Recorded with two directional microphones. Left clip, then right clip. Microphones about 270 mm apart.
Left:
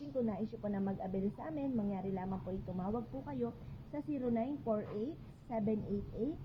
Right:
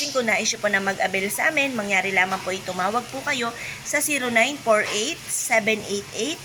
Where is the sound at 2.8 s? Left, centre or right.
Right.